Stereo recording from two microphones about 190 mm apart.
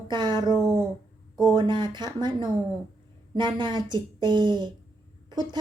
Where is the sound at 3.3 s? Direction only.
25° right (ahead or behind).